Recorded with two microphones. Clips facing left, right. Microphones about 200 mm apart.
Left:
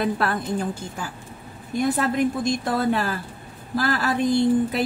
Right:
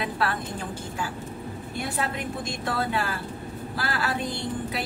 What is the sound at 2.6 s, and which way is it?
A woman's voice, 40° left (ahead or behind).